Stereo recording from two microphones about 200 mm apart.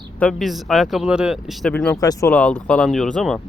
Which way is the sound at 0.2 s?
Centre (ahead or behind).